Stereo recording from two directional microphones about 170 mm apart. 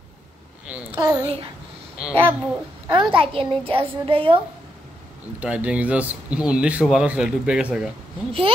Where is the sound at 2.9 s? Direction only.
30° right (ahead or behind).